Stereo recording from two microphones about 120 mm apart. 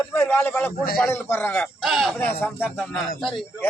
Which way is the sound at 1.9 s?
Centre (ahead or behind).